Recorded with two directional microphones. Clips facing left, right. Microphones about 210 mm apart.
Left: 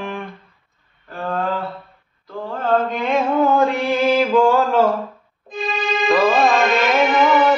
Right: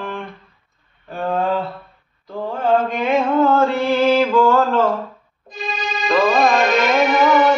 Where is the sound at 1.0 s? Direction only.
20° right (ahead or behind).